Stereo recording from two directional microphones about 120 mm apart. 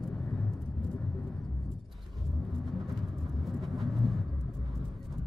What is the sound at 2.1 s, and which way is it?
Vehicle, centre (ahead or behind).